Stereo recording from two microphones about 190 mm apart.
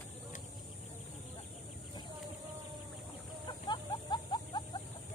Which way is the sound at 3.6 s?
25° left (ahead or behind).